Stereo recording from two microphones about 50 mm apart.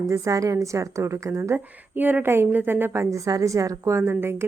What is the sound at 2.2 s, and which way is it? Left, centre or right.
Speech, right.